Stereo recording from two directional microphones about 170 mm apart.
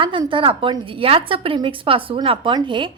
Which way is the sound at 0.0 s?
30° right (ahead or behind).